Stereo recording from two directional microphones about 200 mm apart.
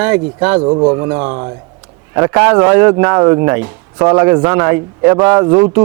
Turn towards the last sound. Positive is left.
turn(degrees=-15)  # may be behind; listen again after turning